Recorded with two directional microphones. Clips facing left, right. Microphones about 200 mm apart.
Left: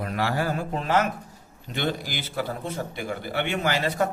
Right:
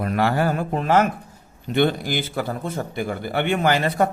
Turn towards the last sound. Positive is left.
turn(degrees=-55)  # may be behind; listen again after turning